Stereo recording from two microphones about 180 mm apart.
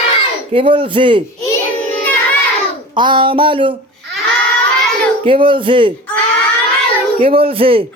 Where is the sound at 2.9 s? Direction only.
25° right (ahead or behind).